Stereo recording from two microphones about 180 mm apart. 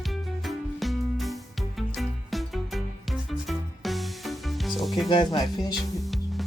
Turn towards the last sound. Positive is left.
turn(degrees=0)  # may be behind; listen again after turning